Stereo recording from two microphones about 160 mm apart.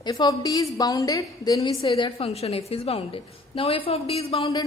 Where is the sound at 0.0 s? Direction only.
25° left (ahead or behind).